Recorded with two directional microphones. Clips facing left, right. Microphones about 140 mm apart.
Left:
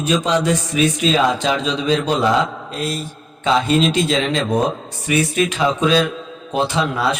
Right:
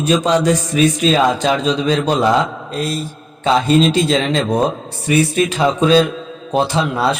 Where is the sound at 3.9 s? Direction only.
35° right (ahead or behind).